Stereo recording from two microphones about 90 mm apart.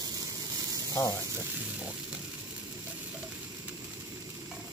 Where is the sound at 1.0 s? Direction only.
35° left (ahead or behind).